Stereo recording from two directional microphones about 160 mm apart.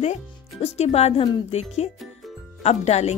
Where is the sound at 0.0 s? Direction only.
40° left (ahead or behind).